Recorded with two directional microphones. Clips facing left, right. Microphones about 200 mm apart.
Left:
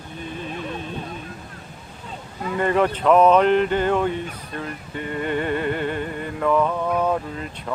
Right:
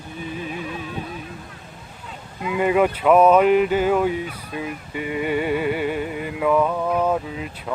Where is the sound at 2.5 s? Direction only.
10° right (ahead or behind).